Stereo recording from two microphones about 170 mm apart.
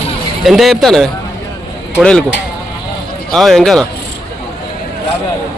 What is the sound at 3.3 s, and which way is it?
Speech, centre (ahead or behind).